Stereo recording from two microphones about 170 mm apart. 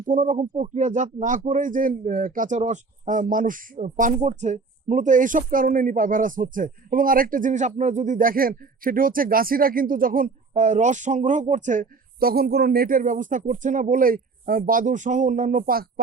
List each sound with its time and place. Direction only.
0.0 s speech: 50° right (ahead or behind)